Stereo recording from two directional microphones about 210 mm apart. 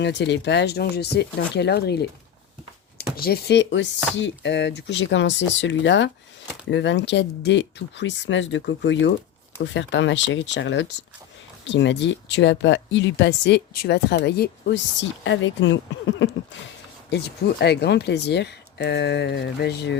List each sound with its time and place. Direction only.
0.0 s speech: 55° left (ahead or behind)
3.2 s speech: 45° left (ahead or behind)
15.2 s speech: 60° left (ahead or behind)